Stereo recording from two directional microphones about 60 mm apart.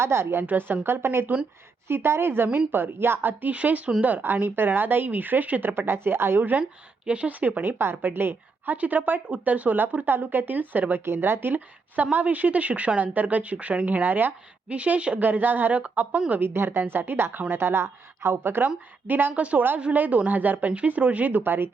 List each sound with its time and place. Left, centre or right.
0.0 s a woman's voice: right
0.4 s a woman's voice: right
3.5 s a woman's voice: right
6.5 s a woman's voice: centre
14.7 s speech: centre
16.3 s a woman's voice: right
19.3 s speech: right